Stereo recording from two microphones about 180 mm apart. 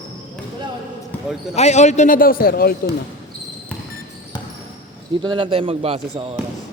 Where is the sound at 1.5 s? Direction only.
40° left (ahead or behind); by 2.9 s 55° left (ahead or behind).